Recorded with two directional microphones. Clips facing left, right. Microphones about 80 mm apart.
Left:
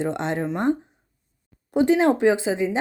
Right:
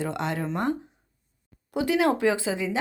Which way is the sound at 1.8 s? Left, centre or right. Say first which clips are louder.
Left 5 dB; left.